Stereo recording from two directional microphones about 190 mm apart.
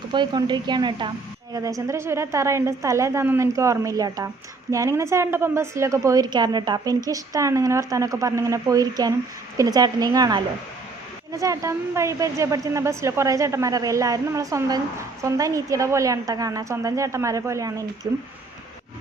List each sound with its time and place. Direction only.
0.1 s a woman's voice: 25° right (ahead or behind)